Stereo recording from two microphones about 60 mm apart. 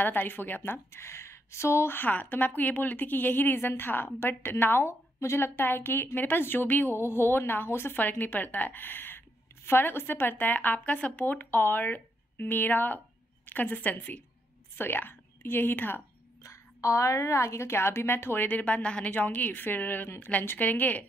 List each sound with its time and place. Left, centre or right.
0.0 s a woman's voice: left
16.4 s a woman's voice: left
18.6 s a woman's voice: left
19.1 s a woman's voice: left